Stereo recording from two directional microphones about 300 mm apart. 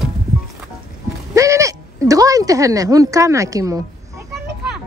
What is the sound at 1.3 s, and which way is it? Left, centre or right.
Speech, centre.